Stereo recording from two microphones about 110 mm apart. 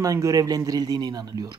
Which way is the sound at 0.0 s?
30° right (ahead or behind).